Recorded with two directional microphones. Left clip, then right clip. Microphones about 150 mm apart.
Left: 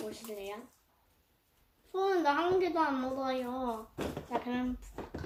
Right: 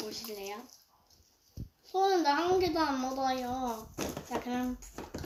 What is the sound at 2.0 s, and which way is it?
A woman's voice, 10° right (ahead or behind).